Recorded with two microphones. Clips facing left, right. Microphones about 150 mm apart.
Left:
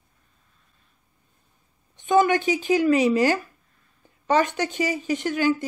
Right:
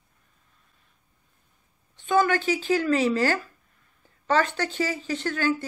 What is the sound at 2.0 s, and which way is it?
Speech, 20° left (ahead or behind).